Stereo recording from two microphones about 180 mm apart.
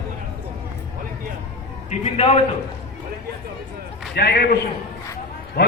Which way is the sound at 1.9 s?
35° left (ahead or behind).